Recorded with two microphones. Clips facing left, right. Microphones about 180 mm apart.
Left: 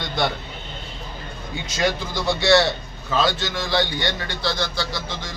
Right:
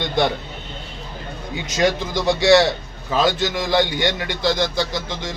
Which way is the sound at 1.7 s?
15° right (ahead or behind).